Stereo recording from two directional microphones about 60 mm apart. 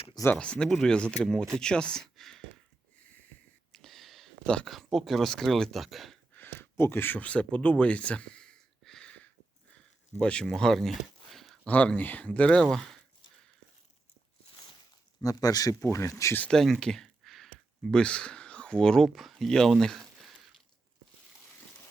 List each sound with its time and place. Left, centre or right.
0.3 s speech: centre
3.7 s a sound: centre
4.6 s speech: centre
6.3 s a sound: left
7.2 s speech: left
8.8 s a sound: centre
10.4 s speech: centre
11.6 s speech: left
12.7 s speech: centre
15.2 s speech: left
16.5 s speech: centre
16.8 s a sound: centre
17.9 s speech: centre